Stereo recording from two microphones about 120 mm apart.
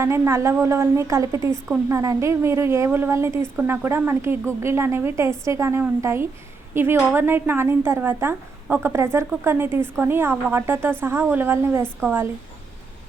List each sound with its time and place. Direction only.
0.0 s a woman's voice: 25° right (ahead or behind)